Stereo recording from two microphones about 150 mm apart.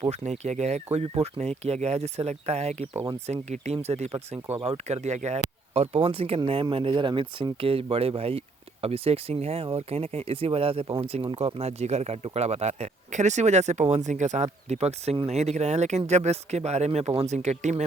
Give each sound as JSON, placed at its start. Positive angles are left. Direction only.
{"t": 0.0, "sound": "speech", "side_deg": -50}